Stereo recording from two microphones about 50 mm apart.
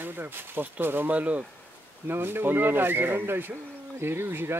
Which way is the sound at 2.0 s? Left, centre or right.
Right.